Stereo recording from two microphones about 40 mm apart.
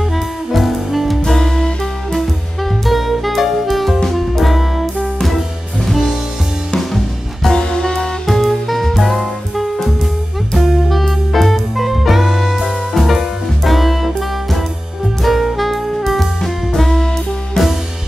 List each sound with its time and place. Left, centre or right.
0.1 s music: centre
1.4 s music: centre
5.9 s music: centre
7.5 s music: centre
8.3 s music: centre
15.2 s saxophone: centre
17.6 s music: centre